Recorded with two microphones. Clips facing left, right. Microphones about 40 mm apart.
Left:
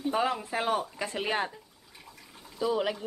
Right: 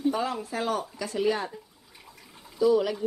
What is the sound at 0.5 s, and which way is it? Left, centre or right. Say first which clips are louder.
Speech: even; left.